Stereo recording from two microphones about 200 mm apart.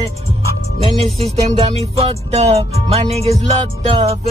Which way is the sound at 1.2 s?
30° right (ahead or behind).